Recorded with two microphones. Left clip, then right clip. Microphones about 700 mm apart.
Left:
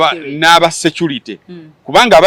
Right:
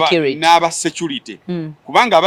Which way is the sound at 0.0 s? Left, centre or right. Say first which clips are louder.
Left 2 dB; left.